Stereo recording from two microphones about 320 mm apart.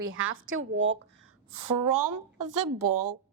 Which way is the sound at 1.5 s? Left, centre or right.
Right.